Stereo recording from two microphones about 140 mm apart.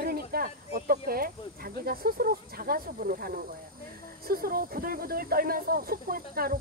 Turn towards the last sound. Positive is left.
turn(degrees=-90)